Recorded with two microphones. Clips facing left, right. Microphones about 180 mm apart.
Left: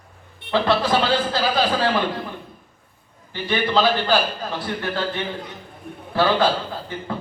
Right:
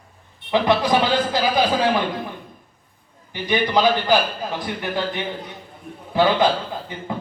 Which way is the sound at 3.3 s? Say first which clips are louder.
Right 1 dB; 15° right (ahead or behind).